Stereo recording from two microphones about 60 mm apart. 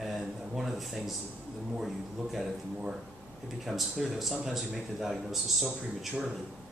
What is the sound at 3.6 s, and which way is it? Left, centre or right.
A man's voice, centre.